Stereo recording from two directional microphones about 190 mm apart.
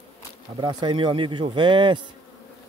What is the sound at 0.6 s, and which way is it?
Speech, 25° right (ahead or behind).